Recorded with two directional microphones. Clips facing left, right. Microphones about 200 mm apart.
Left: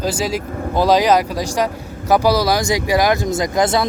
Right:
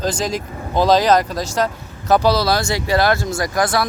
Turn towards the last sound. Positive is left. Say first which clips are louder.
# left 2 dB
turn(degrees=20)  # may be behind; listen again after turning